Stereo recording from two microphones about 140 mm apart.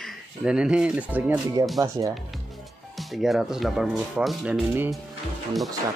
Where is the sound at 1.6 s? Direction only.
25° right (ahead or behind).